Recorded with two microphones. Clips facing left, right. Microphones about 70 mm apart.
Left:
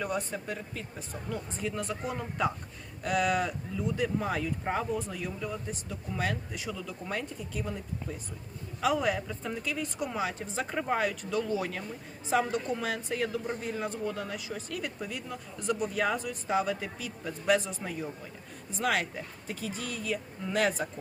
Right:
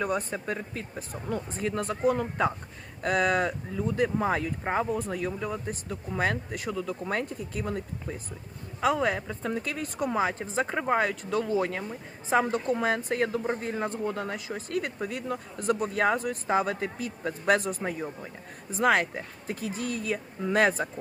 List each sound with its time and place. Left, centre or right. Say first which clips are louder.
0.0 s speech: right 4 dB; right
8.8 s a woman's voice: right 2 dB; right
9.4 s a woman's voice: right 3 dB; right